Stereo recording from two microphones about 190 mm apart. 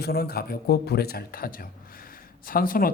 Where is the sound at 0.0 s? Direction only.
55° left (ahead or behind).